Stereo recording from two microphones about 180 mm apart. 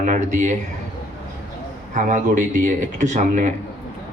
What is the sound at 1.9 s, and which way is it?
A man's voice, 45° right (ahead or behind).